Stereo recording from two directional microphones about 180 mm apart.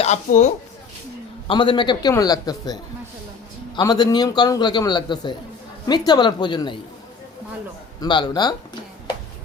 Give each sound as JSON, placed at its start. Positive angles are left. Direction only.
{"t": 0.0, "sound": "speech", "side_deg": 40}
{"t": 1.5, "sound": "a man's voice", "side_deg": 25}
{"t": 3.8, "sound": "a man's voice", "side_deg": 25}
{"t": 8.0, "sound": "a man's voice", "side_deg": 25}